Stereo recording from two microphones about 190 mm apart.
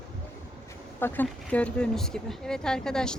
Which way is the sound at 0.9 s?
10° left (ahead or behind).